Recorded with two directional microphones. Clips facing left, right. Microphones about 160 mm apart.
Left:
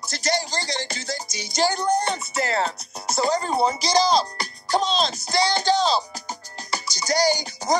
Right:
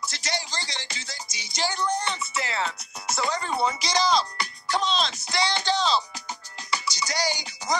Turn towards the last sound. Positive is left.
turn(degrees=40)  # may be behind; listen again after turning